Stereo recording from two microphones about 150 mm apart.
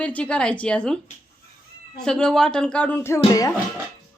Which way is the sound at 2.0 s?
5° left (ahead or behind).